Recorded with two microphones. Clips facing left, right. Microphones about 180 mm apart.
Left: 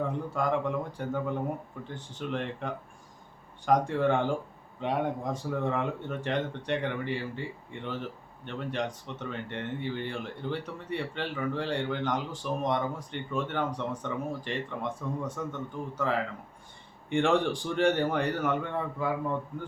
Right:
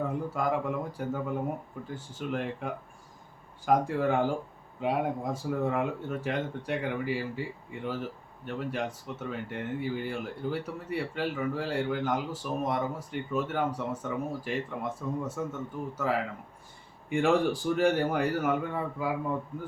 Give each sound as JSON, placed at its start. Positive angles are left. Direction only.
{"t": 0.1, "sound": "speech", "side_deg": -5}